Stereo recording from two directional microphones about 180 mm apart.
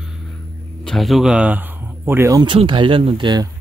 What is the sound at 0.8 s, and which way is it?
Speech, centre (ahead or behind).